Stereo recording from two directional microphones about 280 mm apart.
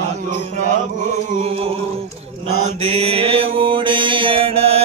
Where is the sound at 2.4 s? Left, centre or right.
Right.